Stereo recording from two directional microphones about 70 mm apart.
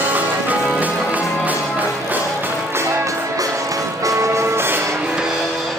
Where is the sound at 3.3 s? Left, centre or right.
Right.